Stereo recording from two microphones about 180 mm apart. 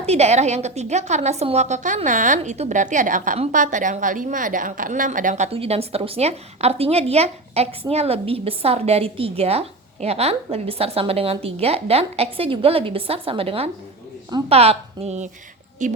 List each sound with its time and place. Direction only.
0.0 s a woman's voice: 35° right (ahead or behind)